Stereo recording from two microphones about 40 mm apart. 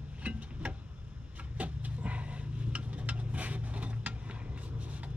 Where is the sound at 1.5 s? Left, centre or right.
Right.